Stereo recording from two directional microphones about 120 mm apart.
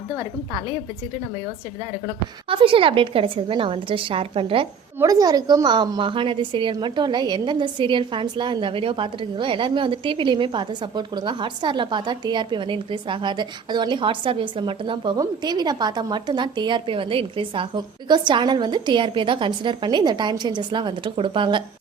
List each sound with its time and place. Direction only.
2.5 s a woman's voice: 45° right (ahead or behind)
4.9 s a woman's voice: 30° right (ahead or behind)